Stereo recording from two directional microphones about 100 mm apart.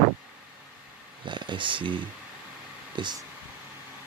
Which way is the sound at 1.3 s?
50° right (ahead or behind).